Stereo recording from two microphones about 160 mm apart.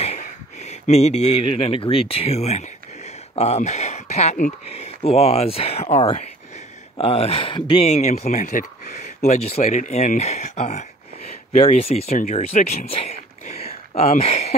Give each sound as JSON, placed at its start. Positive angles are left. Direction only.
{"t": 0.0, "sound": "speech", "side_deg": 45}
{"t": 7.9, "sound": "speech", "side_deg": 45}